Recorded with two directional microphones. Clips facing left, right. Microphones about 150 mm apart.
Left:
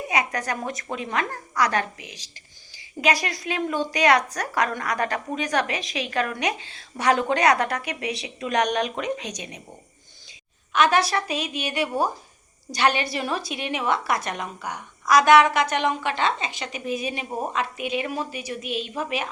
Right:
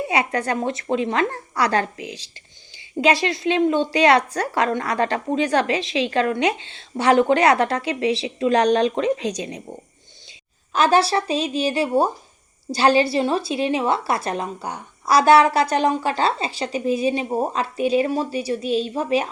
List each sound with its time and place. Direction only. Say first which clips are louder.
0.0 s a woman's voice: right 4 dB; 30° right (ahead or behind)
10.7 s a woman's voice: right 3 dB; 30° right (ahead or behind)